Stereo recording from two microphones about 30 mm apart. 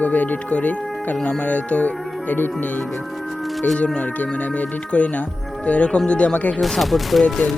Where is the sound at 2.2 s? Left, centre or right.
Left.